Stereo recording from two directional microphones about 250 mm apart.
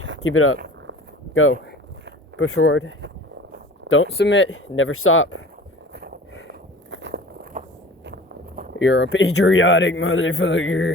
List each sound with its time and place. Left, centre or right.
0.3 s a man's voice: left
4.4 s speech: left
5.9 s a sound: right
6.9 s walk: right
7.6 s a sound: right
8.0 s walk: right
8.8 s a man's voice: left